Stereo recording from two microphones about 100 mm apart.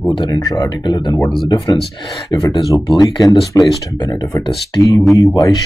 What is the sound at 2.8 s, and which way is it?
Speech, 45° left (ahead or behind).